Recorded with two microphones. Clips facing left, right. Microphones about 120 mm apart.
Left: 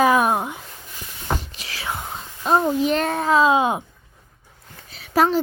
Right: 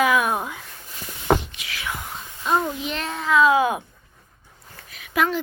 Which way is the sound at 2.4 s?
35° left (ahead or behind).